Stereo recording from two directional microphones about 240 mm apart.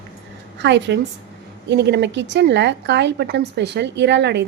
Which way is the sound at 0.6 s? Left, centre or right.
Right.